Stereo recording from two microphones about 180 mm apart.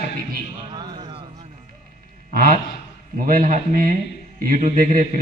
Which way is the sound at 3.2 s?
45° right (ahead or behind).